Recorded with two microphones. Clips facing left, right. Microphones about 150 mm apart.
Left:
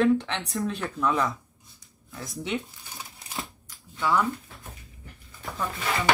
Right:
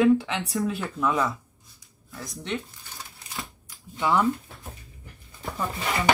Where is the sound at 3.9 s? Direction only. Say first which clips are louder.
Right 2 dB; 20° right (ahead or behind).